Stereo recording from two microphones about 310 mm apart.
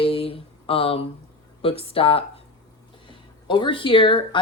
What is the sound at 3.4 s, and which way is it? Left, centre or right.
Speech, centre.